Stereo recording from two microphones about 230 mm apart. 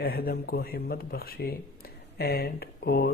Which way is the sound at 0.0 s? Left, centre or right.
Left.